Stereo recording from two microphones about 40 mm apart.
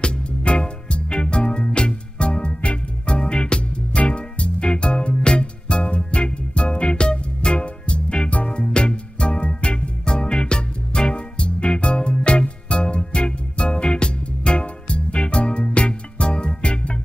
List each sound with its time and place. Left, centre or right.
0.0 s music: left